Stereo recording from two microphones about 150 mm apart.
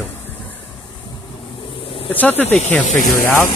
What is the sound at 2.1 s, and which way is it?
Speech, 10° left (ahead or behind).